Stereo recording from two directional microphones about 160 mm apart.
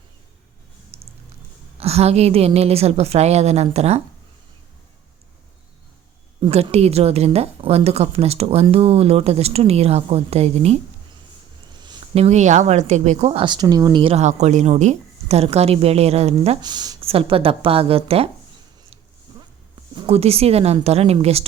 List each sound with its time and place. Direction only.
0.9 s a sound: 40° right (ahead or behind)
1.8 s speech: 40° right (ahead or behind)
6.4 s speech: 40° right (ahead or behind)
12.1 s speech: 45° right (ahead or behind)
16.6 s speech: 25° right (ahead or behind)
17.0 s speech: 35° right (ahead or behind)
19.3 s a sound: 25° right (ahead or behind)
20.0 s speech: 40° right (ahead or behind)